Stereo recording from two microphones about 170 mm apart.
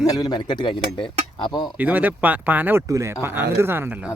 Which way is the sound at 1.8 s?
10° right (ahead or behind).